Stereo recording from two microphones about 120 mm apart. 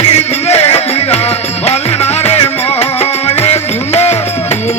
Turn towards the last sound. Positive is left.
turn(degrees=65)  # may be behind; listen again after turning